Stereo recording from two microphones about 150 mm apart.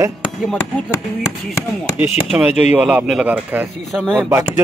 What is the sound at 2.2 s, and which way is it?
A man's voice, 5° right (ahead or behind).